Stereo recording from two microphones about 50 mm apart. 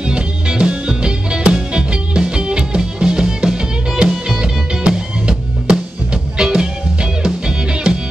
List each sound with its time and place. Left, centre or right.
0.0 s music: centre